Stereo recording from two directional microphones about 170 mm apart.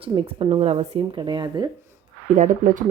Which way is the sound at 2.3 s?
50° right (ahead or behind).